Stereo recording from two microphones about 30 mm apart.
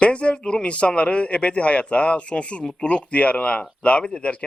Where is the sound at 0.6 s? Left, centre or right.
Left.